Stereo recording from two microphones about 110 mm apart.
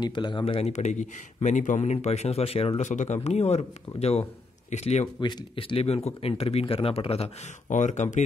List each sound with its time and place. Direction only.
0.0 s speech: 45° left (ahead or behind)
0.6 s speech: 80° left
5.2 s speech: 50° left (ahead or behind)
7.7 s speech: 90° left